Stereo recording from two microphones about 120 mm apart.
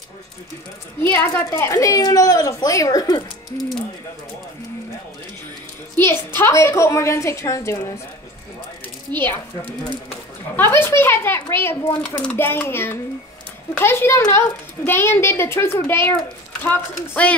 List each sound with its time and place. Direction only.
1.0 s a woman's voice: 15° left (ahead or behind)
5.9 s a woman's voice: 20° left (ahead or behind)
9.1 s a woman's voice: 15° left (ahead or behind)